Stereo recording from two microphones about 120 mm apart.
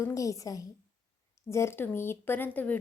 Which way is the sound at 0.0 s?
25° left (ahead or behind).